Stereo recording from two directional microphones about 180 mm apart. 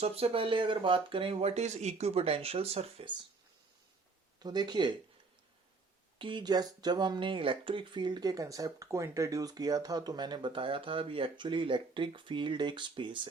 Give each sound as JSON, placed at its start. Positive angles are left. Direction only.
{"t": 0.0, "sound": "speech", "side_deg": -35}
{"t": 4.4, "sound": "speech", "side_deg": -25}
{"t": 6.1, "sound": "speech", "side_deg": -25}